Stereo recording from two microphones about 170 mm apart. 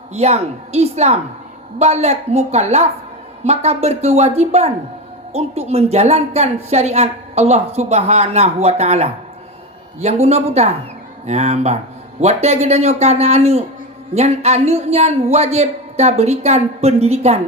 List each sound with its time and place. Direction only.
0.1 s a woman's voice: 40° right (ahead or behind)